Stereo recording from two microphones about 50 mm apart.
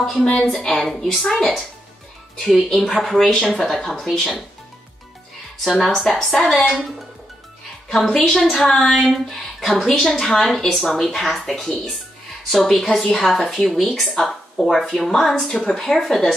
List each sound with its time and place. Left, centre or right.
0.1 s a woman's voice: centre
5.7 s a woman's voice: centre
5.9 s speech: centre